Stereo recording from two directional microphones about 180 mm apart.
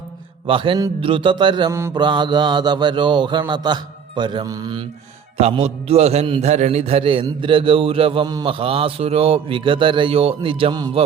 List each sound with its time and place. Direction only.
0.4 s mantra: 30° right (ahead or behind)
5.4 s a man's voice: 35° right (ahead or behind)